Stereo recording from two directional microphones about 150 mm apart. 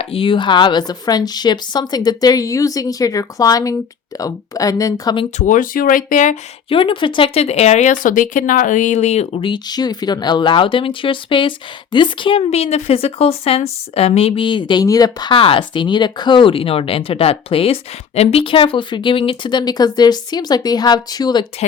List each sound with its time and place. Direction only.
0.0 s speech: 40° left (ahead or behind); by 5.1 s 25° left (ahead or behind)
5.4 s speech: 60° left (ahead or behind)
6.7 s speech: 35° left (ahead or behind)